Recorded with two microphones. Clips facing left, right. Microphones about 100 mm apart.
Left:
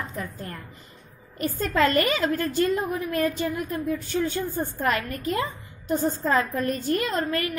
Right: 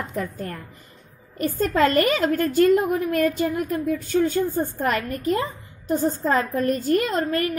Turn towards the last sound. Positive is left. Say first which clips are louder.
# right 3 dB
turn(degrees=-40)  # may be behind; listen again after turning